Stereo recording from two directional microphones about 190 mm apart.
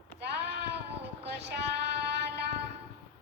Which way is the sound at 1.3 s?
60° right (ahead or behind).